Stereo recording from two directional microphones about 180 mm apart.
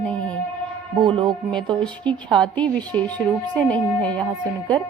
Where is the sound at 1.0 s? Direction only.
25° right (ahead or behind).